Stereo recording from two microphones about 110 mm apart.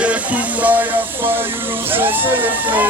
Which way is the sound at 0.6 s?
15° right (ahead or behind).